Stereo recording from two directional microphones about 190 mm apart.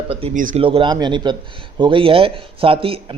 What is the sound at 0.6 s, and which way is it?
Speech, 30° right (ahead or behind).